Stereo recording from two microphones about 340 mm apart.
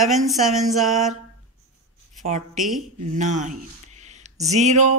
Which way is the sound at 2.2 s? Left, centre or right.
Right.